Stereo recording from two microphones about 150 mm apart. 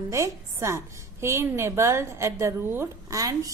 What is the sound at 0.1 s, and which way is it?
A woman's voice, 20° right (ahead or behind).